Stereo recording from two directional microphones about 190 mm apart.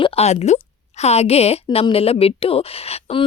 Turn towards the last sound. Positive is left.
turn(degrees=35)  # may be behind; listen again after turning